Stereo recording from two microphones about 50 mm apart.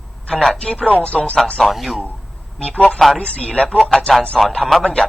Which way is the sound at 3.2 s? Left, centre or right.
Centre.